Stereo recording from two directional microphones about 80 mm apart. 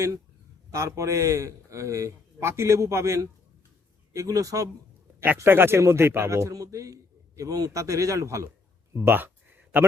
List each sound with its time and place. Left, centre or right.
0.7 s a man's voice: right
5.4 s a man's voice: right
8.9 s a sound: right